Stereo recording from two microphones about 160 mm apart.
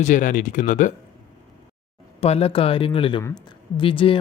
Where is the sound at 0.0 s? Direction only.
55° left (ahead or behind).